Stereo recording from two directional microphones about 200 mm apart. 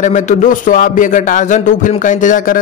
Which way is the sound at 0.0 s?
35° left (ahead or behind).